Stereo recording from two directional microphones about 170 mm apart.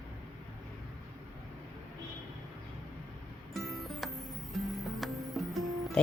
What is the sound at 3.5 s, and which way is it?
Music, centre (ahead or behind).